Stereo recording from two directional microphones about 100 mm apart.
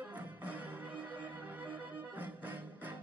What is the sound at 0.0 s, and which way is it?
Music, 15° right (ahead or behind).